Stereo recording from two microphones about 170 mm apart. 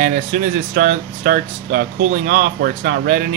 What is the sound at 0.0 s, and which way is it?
Speech, 55° right (ahead or behind).